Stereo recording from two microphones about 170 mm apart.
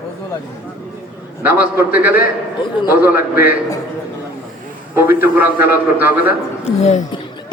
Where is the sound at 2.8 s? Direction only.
10° right (ahead or behind).